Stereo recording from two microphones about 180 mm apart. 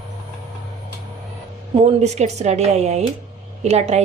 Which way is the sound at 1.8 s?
40° right (ahead or behind).